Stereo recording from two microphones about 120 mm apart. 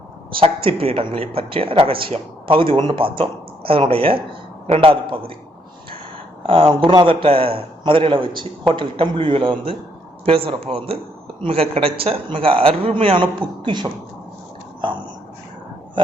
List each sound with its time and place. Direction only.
0.3 s a man's voice: 50° right (ahead or behind)
4.9 s a man's voice: 45° right (ahead or behind)
6.4 s a man's voice: 50° right (ahead or behind)